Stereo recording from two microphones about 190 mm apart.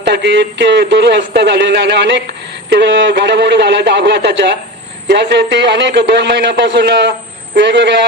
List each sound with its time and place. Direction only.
0.0 s a man's voice: 65° right (ahead or behind)